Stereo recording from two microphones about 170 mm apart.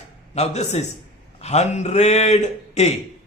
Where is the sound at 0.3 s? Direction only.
40° left (ahead or behind).